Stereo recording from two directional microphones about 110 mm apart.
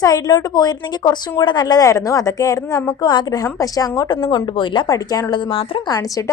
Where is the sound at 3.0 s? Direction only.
45° left (ahead or behind).